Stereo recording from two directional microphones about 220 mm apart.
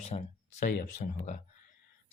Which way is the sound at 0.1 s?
30° left (ahead or behind).